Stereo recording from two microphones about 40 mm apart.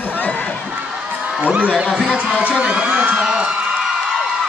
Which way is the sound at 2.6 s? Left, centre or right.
Right.